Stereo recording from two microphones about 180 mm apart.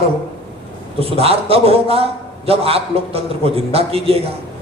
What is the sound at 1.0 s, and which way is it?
A man's voice, 35° right (ahead or behind).